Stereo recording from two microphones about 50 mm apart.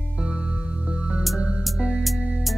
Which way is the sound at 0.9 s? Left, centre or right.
Centre.